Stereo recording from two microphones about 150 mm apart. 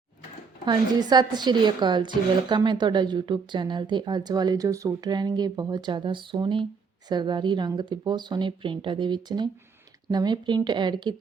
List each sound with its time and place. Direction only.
0.6 s a woman's voice: 30° right (ahead or behind)